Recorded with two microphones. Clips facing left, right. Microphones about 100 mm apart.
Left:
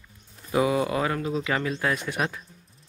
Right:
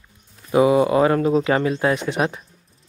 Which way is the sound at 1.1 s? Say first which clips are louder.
Right 10 dB; 50° right (ahead or behind).